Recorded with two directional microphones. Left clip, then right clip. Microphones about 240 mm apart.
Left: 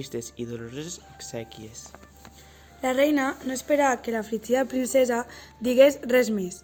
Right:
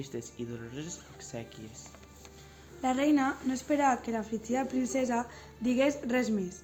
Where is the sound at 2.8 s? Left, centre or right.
Left.